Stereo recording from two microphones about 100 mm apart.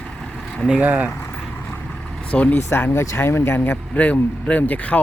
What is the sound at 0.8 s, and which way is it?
Speech, 15° right (ahead or behind).